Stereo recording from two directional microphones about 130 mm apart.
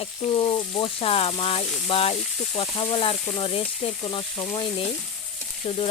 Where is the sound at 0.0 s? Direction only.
45° left (ahead or behind).